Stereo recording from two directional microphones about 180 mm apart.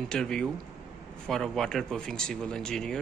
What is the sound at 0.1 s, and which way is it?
Speech, 5° left (ahead or behind).